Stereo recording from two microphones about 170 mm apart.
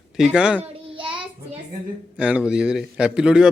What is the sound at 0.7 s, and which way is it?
Child singing, 30° right (ahead or behind).